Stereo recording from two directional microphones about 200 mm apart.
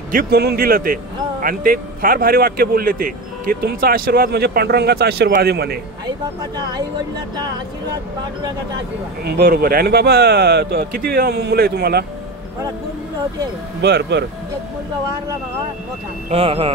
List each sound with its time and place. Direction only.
0.1 s speech: 50° right (ahead or behind)
9.2 s speech: 50° right (ahead or behind)
13.7 s speech: 55° right (ahead or behind)
16.3 s speech: 30° right (ahead or behind)